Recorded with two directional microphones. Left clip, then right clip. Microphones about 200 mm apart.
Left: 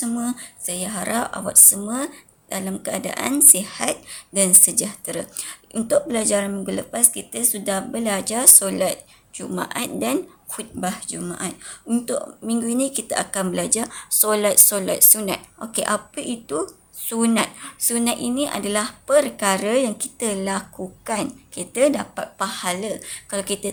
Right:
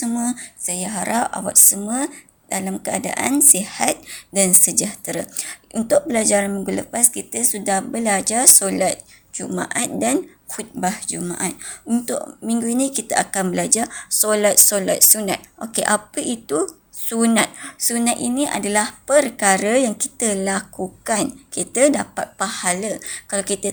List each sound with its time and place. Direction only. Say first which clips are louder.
0.0 s speech: right 3 dB; 15° right (ahead or behind)